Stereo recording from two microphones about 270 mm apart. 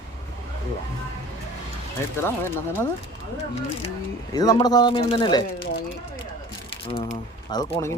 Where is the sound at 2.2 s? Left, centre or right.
Centre.